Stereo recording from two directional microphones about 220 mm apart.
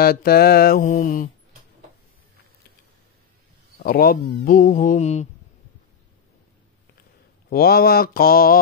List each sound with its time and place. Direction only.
0.0 s mantra: 45° left (ahead or behind)
3.8 s speech: 45° left (ahead or behind)
7.4 s mantra: 45° left (ahead or behind)